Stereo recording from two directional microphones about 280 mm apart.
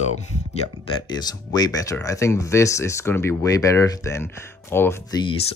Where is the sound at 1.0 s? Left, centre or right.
Centre.